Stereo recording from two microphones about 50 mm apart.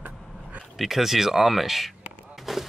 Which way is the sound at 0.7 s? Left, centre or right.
Centre.